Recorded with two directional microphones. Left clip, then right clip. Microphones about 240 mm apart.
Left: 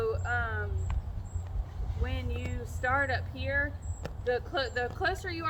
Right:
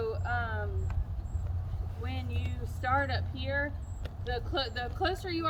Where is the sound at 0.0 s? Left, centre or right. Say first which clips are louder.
Left 2 dB; centre.